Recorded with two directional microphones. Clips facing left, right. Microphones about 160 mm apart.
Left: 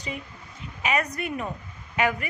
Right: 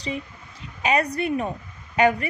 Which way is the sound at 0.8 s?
35° right (ahead or behind).